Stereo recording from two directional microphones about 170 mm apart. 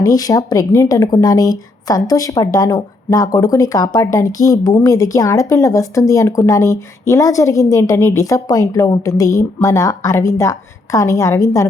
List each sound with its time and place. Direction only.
0.0 s speech: 20° left (ahead or behind)